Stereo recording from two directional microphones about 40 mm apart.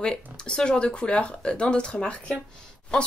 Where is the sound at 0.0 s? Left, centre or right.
Left.